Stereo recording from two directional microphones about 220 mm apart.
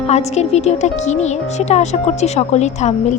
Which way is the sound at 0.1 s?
30° left (ahead or behind).